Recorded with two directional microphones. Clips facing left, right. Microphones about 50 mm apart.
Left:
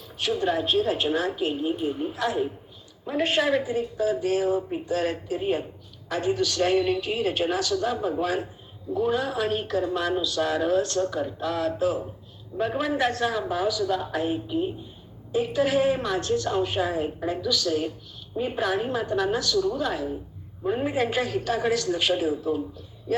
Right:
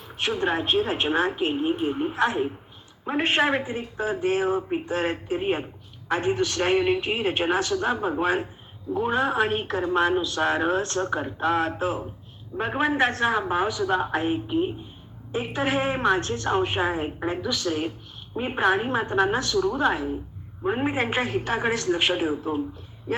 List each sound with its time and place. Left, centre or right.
0.1 s speech: right